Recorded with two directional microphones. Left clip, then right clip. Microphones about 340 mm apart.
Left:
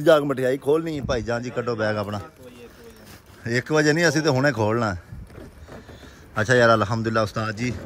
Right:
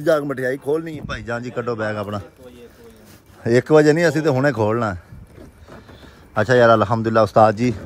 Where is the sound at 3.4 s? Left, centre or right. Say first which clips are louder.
Right 7 dB; centre.